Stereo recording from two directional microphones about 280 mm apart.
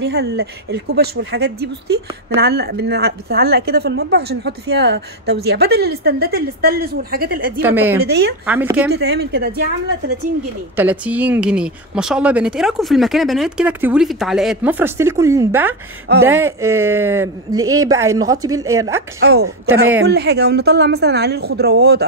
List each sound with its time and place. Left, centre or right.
0.0 s speech: right
7.6 s speech: centre
8.0 s speech: right
8.5 s speech: centre
8.9 s speech: right
10.8 s speech: centre
19.1 s speech: right
19.4 s speech: right
20.0 s speech: right